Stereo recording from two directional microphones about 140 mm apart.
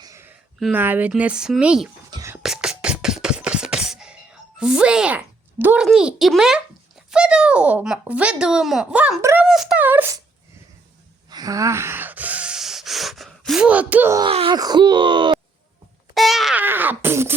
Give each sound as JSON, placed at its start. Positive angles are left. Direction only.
{"t": 0.0, "sound": "a sound", "side_deg": -20}
{"t": 0.7, "sound": "speech", "side_deg": -15}
{"t": 2.0, "sound": "whispering", "side_deg": -30}
{"t": 2.4, "sound": "beatboxing", "side_deg": -5}
{"t": 7.1, "sound": "speech", "side_deg": -5}
{"t": 9.8, "sound": "speech", "side_deg": -15}
{"t": 11.3, "sound": "gasp", "side_deg": -25}
{"t": 14.5, "sound": "speech", "side_deg": -30}
{"t": 16.1, "sound": "a sound", "side_deg": 0}
{"t": 16.6, "sound": "a sound", "side_deg": -15}